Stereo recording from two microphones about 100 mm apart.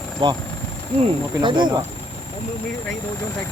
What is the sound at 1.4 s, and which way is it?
Speech, 50° right (ahead or behind).